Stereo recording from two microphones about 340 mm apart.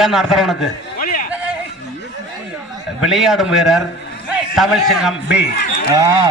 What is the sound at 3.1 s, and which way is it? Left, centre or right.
A man's voice, centre.